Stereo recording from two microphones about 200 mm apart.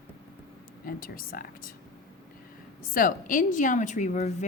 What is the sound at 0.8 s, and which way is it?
Speech, 45° left (ahead or behind).